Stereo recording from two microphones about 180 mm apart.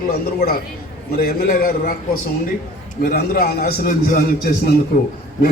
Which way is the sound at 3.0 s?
55° left (ahead or behind).